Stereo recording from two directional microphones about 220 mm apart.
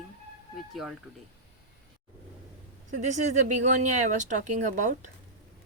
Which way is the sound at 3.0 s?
35° right (ahead or behind).